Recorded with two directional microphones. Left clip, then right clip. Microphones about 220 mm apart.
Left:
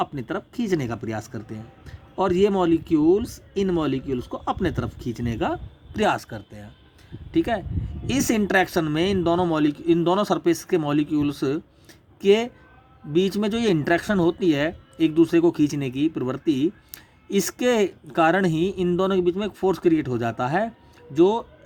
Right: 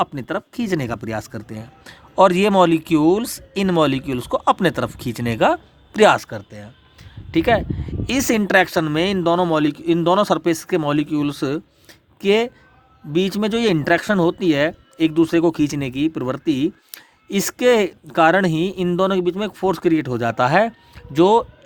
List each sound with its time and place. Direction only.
0.0 s speech: 35° right (ahead or behind)